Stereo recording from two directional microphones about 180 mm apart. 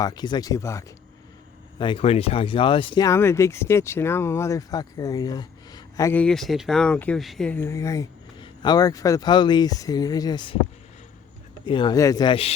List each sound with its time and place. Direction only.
0.0 s speech: 25° left (ahead or behind)
1.8 s speech: 30° left (ahead or behind)
11.6 s speech: 25° left (ahead or behind)